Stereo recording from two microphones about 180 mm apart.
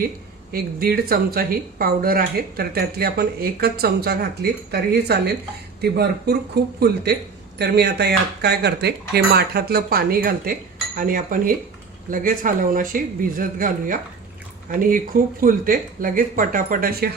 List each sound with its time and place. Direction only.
0.5 s speech: 55° right (ahead or behind)